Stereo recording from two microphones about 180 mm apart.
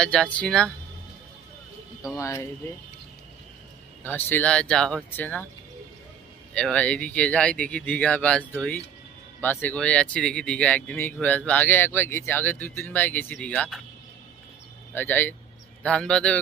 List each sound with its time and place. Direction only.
0.0 s speech: 5° left (ahead or behind)
2.1 s speech: 15° left (ahead or behind)
4.0 s speech: 10° left (ahead or behind)
6.5 s speech: 5° left (ahead or behind)
14.9 s speech: 10° left (ahead or behind)